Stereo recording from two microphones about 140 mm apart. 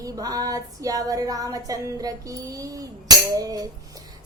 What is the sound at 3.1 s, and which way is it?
Tambourine, 25° right (ahead or behind).